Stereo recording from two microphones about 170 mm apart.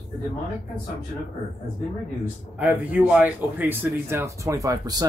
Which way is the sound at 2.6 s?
10° right (ahead or behind).